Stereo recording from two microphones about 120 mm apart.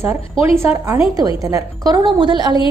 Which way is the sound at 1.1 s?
30° right (ahead or behind).